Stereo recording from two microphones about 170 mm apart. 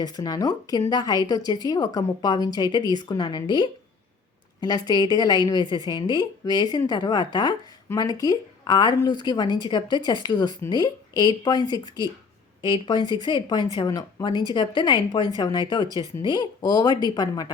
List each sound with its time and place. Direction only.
0.0 s a woman's voice: 20° left (ahead or behind)